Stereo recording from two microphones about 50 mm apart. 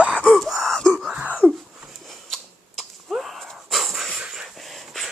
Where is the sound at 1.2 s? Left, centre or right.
Right.